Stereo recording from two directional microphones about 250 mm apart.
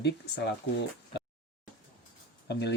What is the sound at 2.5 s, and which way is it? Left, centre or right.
Speech, left.